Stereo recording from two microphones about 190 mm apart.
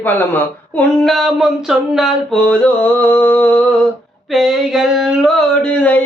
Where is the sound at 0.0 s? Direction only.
10° left (ahead or behind).